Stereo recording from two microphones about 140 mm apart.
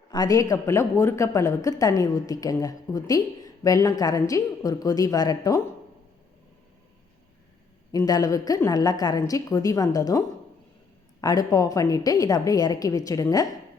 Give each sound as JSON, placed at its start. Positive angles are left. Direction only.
{"t": 0.1, "sound": "a man's voice", "side_deg": 25}
{"t": 7.9, "sound": "a man's voice", "side_deg": 25}